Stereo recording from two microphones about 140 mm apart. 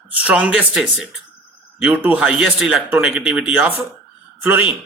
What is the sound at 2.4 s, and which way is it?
Speech, centre (ahead or behind).